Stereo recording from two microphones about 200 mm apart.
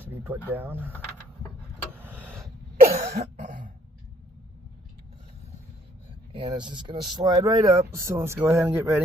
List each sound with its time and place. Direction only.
0.2 s speech: 10° right (ahead or behind)
2.0 s a sound: 10° right (ahead or behind)
2.8 s cough: 35° right (ahead or behind)
6.3 s speech: 20° right (ahead or behind)